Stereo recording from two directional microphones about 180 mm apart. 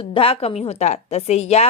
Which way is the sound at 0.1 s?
30° left (ahead or behind).